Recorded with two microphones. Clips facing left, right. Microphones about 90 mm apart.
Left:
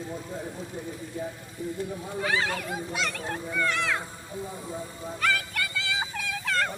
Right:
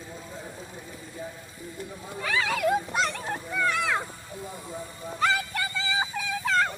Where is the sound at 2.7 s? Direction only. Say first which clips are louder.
Right 6 dB; 40° right (ahead or behind).